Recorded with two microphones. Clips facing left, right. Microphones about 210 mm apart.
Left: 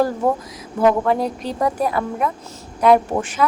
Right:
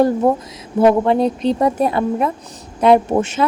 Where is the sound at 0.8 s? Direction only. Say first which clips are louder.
Right 4 dB; 25° right (ahead or behind).